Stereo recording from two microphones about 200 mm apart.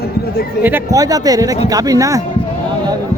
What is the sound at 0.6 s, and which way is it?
Speech, 15° right (ahead or behind).